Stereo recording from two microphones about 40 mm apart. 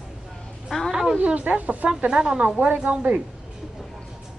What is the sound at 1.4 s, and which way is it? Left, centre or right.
Speech, right.